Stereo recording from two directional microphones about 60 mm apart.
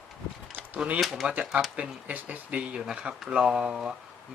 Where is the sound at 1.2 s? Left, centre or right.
Centre.